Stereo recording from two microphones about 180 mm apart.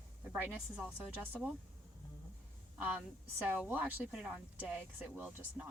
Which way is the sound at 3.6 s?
10° right (ahead or behind).